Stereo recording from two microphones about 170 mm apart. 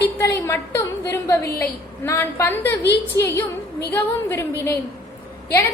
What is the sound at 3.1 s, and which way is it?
A woman's voice, 15° left (ahead or behind).